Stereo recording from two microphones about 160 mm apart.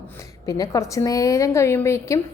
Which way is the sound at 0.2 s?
20° left (ahead or behind).